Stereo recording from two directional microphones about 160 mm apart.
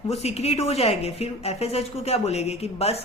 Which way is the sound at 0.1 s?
40° left (ahead or behind).